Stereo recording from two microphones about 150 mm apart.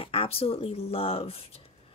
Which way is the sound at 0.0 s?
35° left (ahead or behind).